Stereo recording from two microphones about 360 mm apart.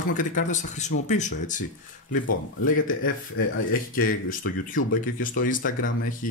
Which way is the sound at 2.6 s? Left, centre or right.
Left.